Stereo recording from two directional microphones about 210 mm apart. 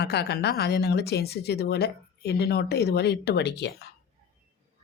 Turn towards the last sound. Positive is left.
turn(degrees=55)  # may be behind; listen again after turning